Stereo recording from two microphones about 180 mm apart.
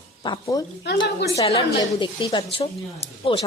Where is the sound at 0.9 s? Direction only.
70° left (ahead or behind).